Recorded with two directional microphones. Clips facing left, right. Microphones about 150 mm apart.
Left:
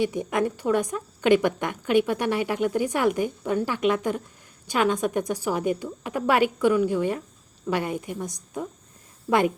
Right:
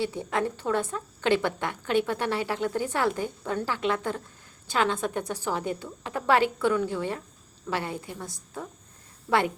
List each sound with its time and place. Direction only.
0.0 s a woman's voice: 15° left (ahead or behind)